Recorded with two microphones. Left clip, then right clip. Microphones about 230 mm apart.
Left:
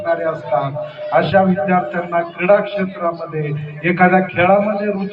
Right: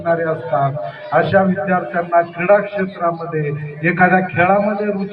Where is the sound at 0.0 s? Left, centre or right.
Left.